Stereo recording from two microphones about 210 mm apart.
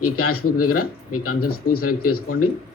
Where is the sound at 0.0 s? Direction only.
90° left.